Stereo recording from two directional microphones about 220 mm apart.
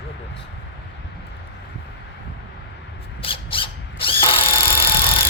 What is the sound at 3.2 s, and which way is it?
Drill, 25° left (ahead or behind).